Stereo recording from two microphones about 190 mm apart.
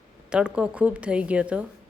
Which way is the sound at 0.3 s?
5° right (ahead or behind).